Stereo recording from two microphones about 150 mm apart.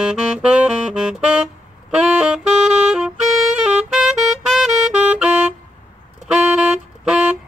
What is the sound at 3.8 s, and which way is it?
Music, 5° right (ahead or behind).